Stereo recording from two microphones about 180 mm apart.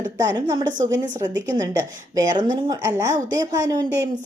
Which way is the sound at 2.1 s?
25° right (ahead or behind).